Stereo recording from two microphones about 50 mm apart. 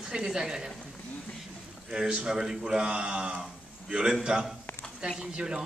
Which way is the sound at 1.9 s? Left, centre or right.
Centre.